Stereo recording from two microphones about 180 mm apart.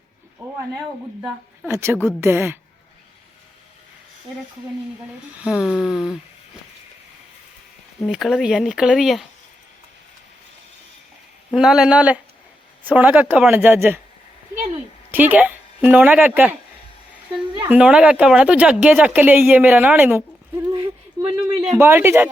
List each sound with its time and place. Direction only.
1.7 s speech: 15° right (ahead or behind)
5.4 s speech: 5° right (ahead or behind)
8.0 s speech: centre (ahead or behind)
11.5 s speech: 5° right (ahead or behind)
15.1 s speech: 10° right (ahead or behind)
17.7 s speech: 5° right (ahead or behind)
20.7 s a sound: 30° right (ahead or behind)
21.8 s speech: 15° right (ahead or behind)